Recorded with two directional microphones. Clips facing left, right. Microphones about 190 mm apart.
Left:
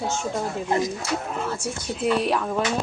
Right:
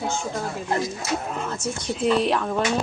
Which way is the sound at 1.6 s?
10° left (ahead or behind).